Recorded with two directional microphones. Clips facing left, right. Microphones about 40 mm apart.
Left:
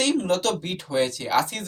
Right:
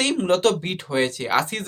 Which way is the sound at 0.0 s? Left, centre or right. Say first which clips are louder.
Right 3 dB; right.